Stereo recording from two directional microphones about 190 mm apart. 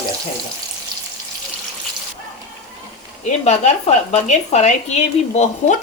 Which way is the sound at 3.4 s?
35° left (ahead or behind).